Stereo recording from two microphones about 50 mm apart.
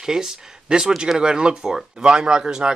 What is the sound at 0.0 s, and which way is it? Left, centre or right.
Speech, centre.